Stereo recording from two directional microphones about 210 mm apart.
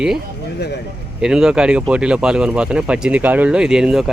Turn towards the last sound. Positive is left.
turn(degrees=0)  # may be behind; listen again after turning